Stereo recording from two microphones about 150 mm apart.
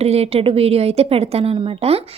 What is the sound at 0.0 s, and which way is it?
A woman's voice, 45° right (ahead or behind).